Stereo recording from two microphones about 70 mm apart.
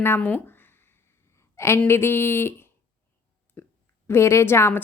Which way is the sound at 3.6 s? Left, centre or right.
Left.